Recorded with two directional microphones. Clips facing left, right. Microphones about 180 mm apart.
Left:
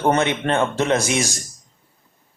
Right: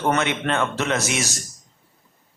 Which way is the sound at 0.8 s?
20° left (ahead or behind).